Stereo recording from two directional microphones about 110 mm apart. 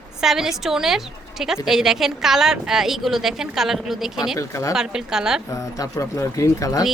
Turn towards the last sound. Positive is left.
turn(degrees=30)  # may be behind; listen again after turning